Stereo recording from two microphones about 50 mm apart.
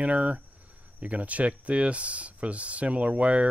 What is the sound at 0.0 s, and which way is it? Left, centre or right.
Speech, right.